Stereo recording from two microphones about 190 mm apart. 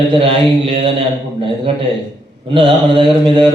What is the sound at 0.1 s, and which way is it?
Mantra, 30° right (ahead or behind).